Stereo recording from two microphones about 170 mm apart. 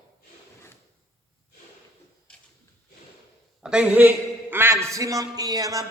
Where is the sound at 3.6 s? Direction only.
5° right (ahead or behind); by 5.9 s 20° right (ahead or behind).